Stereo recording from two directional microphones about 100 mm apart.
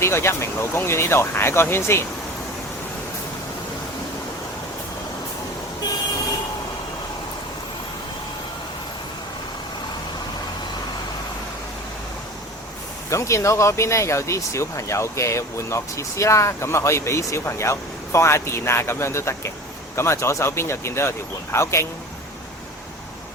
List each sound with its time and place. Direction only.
0.0 s speech: 25° left (ahead or behind)
13.1 s speech: 30° left (ahead or behind)